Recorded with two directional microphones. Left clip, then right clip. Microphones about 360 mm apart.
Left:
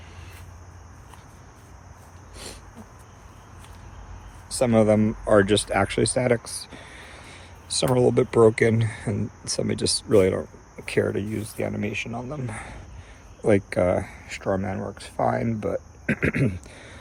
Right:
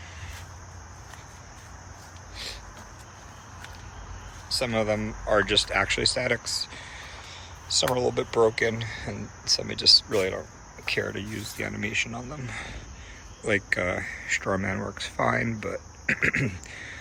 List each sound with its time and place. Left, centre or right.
4.4 s speech: centre